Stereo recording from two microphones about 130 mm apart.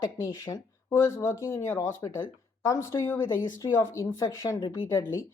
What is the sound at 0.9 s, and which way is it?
Speech, 20° left (ahead or behind).